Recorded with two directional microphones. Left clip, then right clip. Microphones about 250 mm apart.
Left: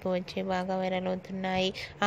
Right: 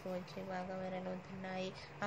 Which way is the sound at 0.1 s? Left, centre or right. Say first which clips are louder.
Left 13 dB; left.